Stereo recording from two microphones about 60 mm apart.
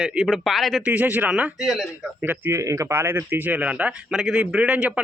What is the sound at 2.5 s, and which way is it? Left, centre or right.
Speech, right.